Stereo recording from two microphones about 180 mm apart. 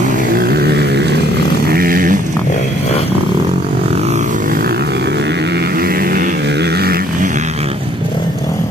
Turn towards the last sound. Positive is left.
turn(degrees=-60)  # may be behind; listen again after turning